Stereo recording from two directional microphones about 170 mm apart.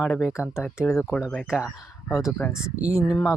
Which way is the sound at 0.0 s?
Centre (ahead or behind).